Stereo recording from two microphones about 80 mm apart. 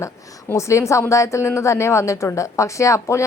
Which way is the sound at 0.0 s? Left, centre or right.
Left.